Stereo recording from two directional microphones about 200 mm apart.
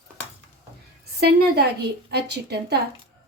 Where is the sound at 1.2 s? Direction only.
50° right (ahead or behind).